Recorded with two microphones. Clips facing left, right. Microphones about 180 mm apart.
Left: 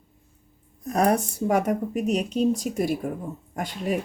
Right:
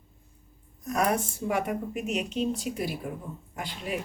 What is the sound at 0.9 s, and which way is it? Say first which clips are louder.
Speech: left 5 dB; 35° left (ahead or behind).